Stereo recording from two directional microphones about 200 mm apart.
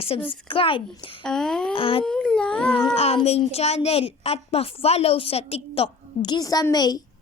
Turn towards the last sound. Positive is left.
turn(degrees=20)  # may be behind; listen again after turning